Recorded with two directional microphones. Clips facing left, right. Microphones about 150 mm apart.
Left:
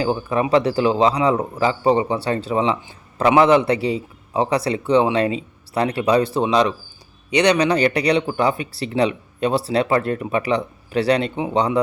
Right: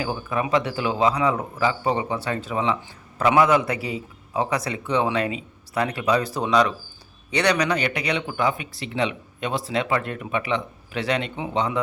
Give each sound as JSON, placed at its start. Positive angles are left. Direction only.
{"t": 0.0, "sound": "speech", "side_deg": 30}